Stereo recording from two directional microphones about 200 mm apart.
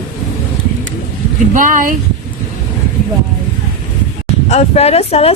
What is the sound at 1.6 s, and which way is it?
Speech, 40° right (ahead or behind).